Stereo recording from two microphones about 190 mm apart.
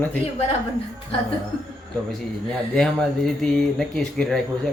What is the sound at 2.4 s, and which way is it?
Speech, 5° left (ahead or behind).